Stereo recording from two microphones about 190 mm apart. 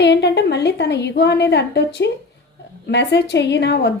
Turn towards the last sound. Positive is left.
turn(degrees=65)  # may be behind; listen again after turning